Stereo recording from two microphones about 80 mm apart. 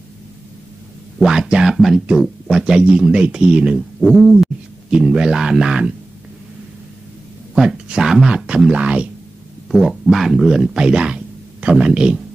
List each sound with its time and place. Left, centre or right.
1.2 s speech: centre
7.5 s speech: centre